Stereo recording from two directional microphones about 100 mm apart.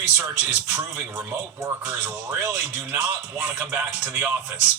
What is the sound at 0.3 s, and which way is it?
A man's voice, 20° right (ahead or behind).